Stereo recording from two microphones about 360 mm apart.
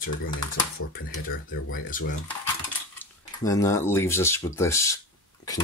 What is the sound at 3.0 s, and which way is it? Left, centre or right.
Speech, centre.